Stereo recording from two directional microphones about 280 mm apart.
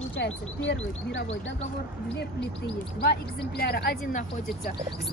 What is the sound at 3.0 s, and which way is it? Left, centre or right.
Speech, left.